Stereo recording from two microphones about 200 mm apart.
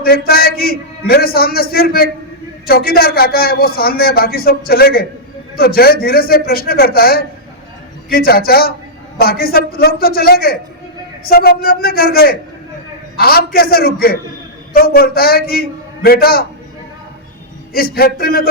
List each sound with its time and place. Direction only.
0.0 s a man's voice: 50° left (ahead or behind)
17.7 s a man's voice: 50° left (ahead or behind)